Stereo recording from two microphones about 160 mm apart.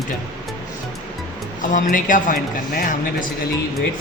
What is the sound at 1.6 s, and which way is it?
Speech, 55° left (ahead or behind).